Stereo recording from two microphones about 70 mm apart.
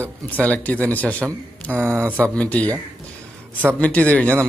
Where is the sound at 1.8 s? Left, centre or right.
Right.